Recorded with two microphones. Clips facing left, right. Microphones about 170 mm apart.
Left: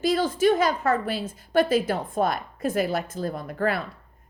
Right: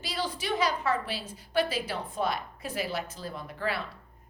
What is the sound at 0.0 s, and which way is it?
A woman's voice, 50° left (ahead or behind).